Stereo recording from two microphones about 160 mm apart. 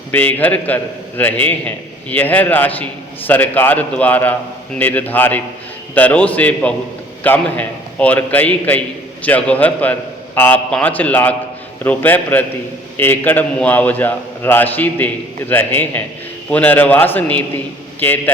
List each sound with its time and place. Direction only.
0.1 s a man's voice: 10° left (ahead or behind)